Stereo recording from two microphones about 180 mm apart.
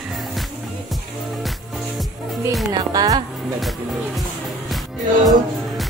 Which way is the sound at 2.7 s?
20° right (ahead or behind).